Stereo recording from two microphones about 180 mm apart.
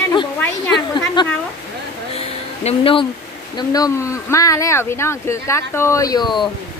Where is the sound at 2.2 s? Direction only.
35° left (ahead or behind).